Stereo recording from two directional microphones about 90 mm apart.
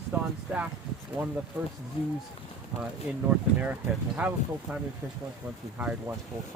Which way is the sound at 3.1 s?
15° right (ahead or behind).